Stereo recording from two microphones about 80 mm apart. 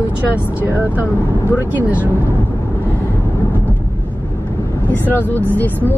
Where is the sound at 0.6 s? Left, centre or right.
Right.